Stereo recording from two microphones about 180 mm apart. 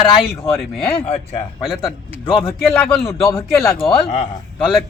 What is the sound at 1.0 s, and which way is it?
Speech, 35° left (ahead or behind).